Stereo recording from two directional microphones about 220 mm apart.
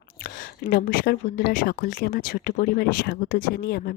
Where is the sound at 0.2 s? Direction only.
40° left (ahead or behind).